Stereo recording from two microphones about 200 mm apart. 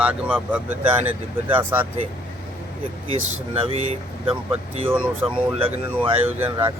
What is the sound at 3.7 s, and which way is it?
Speech, 30° right (ahead or behind).